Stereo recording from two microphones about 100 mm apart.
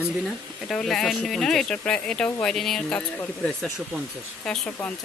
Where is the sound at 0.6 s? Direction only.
5° left (ahead or behind).